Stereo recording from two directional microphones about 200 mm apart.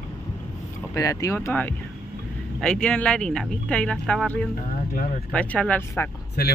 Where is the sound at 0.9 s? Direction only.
15° left (ahead or behind).